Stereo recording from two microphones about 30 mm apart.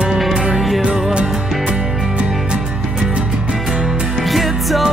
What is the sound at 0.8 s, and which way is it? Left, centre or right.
Music, right.